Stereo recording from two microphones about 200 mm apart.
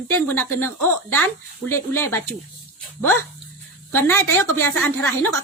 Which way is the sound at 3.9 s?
10° left (ahead or behind).